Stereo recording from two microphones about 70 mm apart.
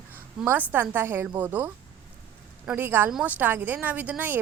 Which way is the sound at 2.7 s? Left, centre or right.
Right.